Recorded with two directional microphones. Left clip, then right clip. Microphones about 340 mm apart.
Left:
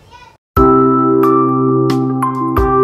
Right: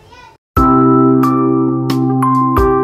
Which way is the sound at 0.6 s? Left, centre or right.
Centre.